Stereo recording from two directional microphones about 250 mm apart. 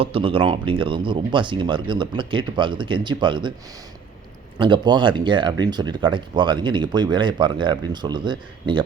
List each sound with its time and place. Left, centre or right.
0.0 s speech: right
4.5 s speech: centre